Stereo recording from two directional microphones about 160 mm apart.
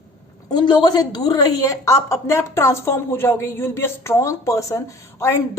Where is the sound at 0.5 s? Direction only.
30° left (ahead or behind).